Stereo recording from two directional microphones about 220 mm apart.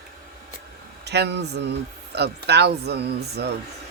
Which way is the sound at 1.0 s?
50° right (ahead or behind).